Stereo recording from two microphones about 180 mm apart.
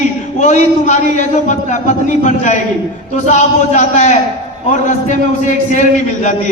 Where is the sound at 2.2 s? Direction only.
40° left (ahead or behind).